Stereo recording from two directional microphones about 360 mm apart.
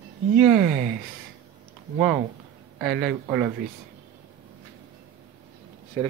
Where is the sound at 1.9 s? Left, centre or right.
Centre.